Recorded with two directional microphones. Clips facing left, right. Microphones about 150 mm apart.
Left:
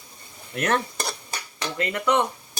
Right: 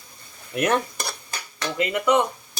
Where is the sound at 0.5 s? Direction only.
15° right (ahead or behind).